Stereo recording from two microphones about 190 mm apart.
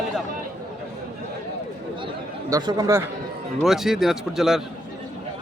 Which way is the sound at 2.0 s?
20° right (ahead or behind).